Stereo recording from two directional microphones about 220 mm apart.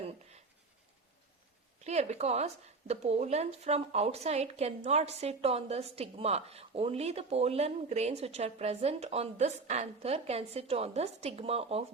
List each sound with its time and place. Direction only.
1.8 s a woman's voice: 30° right (ahead or behind)